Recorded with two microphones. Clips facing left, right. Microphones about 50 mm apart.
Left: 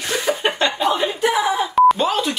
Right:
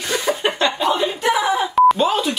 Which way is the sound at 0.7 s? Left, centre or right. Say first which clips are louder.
Even; centre.